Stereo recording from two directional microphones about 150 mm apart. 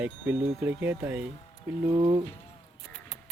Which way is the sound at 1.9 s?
35° right (ahead or behind).